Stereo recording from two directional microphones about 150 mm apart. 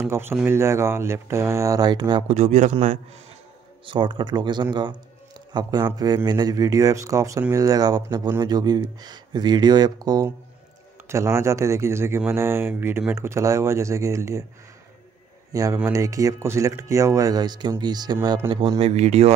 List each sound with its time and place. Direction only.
0.0 s speech: 15° right (ahead or behind)
2.2 s speech: 50° right (ahead or behind)
3.8 s speech: 35° right (ahead or behind)
15.5 s speech: 20° right (ahead or behind); by 19.3 s 45° right (ahead or behind)